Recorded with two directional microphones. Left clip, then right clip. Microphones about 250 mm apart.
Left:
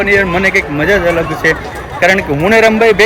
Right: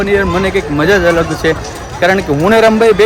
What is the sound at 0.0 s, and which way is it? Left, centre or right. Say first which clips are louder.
Speech: left 2 dB; centre.